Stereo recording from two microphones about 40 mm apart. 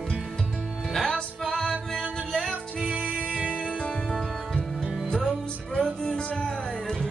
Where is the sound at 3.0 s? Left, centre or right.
Left.